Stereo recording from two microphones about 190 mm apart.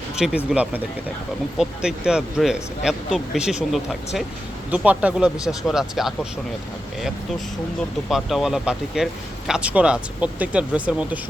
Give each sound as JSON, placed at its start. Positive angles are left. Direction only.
{"t": 0.2, "sound": "speech", "side_deg": -5}
{"t": 8.1, "sound": "speech", "side_deg": 0}